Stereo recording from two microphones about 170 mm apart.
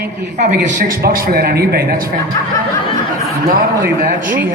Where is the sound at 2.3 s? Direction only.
15° left (ahead or behind).